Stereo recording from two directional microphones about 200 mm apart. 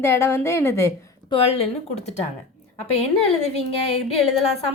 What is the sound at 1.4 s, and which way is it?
Speech, 30° left (ahead or behind).